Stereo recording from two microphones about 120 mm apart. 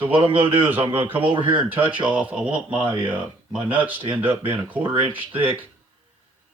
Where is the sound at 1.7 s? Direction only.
15° right (ahead or behind).